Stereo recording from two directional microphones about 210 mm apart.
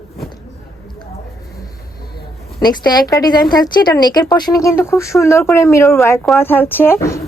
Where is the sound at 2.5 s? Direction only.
20° left (ahead or behind).